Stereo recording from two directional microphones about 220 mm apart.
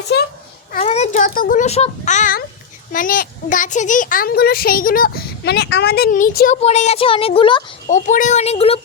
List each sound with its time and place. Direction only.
0.1 s a child's voice: 50° left (ahead or behind)
0.9 s a woman's voice: 30° left (ahead or behind)
7.9 s a woman's voice: 35° left (ahead or behind)